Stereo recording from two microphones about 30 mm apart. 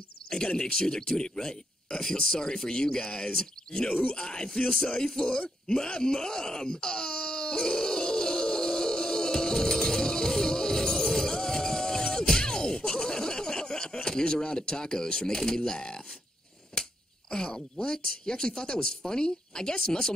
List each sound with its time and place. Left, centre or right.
0.2 s a sound: left
0.7 s speech: left
5.7 s wail: left
14.0 s speech: left
17.3 s speech: left